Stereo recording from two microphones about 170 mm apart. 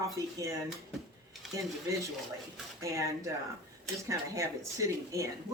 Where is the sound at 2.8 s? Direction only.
20° right (ahead or behind).